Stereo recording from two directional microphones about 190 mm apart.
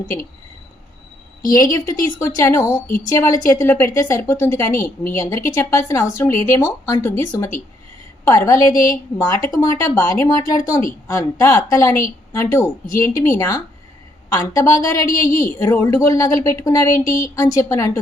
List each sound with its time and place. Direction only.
1.5 s a woman's voice: 20° left (ahead or behind)
8.7 s a woman's voice: 45° left (ahead or behind)
9.1 s a woman's voice: 15° left (ahead or behind)
15.3 s a woman's voice: 45° left (ahead or behind)
15.5 s a woman's voice: 15° left (ahead or behind)